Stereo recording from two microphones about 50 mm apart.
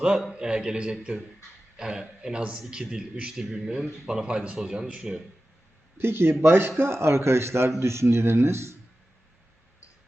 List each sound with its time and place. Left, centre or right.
0.3 s a man's voice: centre
6.0 s a man's voice: right